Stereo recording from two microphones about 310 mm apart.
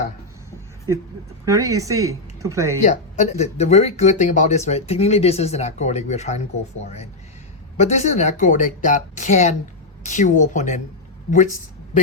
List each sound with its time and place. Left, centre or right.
1.5 s speech: centre
2.8 s speech: left